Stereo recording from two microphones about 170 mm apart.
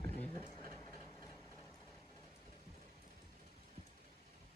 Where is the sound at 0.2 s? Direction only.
15° left (ahead or behind).